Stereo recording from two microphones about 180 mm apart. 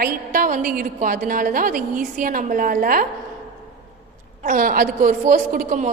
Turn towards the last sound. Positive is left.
turn(degrees=-45)  # may be behind; listen again after turning